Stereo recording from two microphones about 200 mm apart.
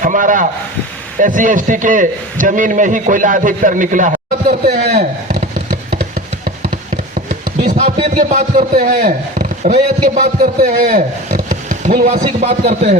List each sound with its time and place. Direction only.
0.0 s a man's voice: 40° right (ahead or behind)
4.9 s speech: 30° right (ahead or behind)
6.4 s a sound: 40° right (ahead or behind)
7.8 s a man's voice: 35° right (ahead or behind)